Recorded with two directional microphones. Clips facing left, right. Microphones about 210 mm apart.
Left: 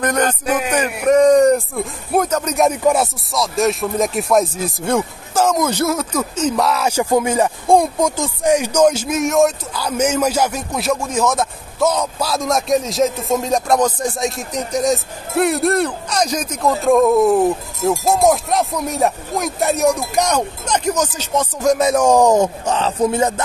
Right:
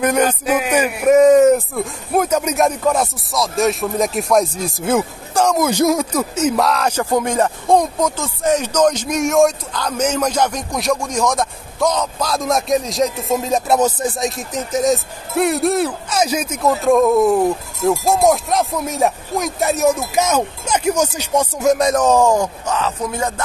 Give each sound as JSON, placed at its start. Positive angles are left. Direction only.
{"t": 0.0, "sound": "a man's voice", "side_deg": -10}
{"t": 2.6, "sound": "speech", "side_deg": 10}
{"t": 5.7, "sound": "speech", "side_deg": -15}
{"t": 21.7, "sound": "speech", "side_deg": 10}